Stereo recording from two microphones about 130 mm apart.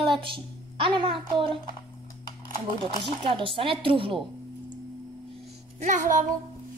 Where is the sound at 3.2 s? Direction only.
40° right (ahead or behind).